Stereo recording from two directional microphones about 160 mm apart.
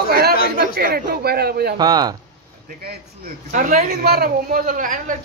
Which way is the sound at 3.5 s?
55° right (ahead or behind).